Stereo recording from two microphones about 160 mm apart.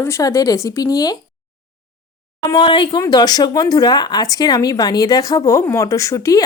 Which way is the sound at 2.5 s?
30° left (ahead or behind).